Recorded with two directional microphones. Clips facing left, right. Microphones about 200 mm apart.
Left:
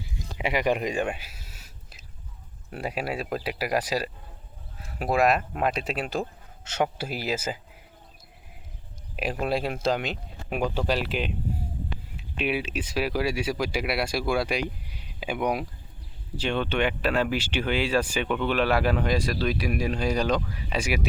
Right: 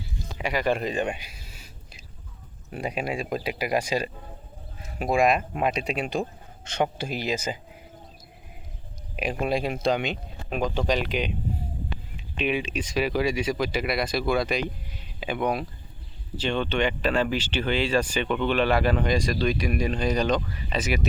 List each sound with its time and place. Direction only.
0.0 s a sound: 20° left (ahead or behind)
2.6 s speech: 5° left (ahead or behind)
9.1 s speech: centre (ahead or behind)